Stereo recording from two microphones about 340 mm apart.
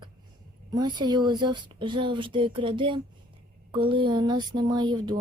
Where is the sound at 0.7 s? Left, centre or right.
Centre.